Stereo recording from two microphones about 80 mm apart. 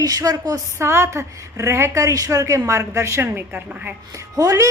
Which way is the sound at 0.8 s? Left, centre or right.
Right.